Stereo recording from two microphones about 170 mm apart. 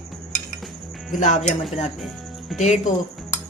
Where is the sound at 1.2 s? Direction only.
45° left (ahead or behind).